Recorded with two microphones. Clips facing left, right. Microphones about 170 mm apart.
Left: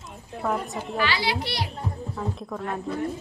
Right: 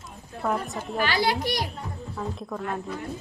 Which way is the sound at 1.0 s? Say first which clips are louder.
Right 2 dB; 45° right (ahead or behind).